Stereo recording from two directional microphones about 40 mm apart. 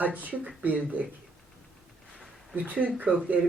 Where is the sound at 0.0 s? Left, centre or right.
Right.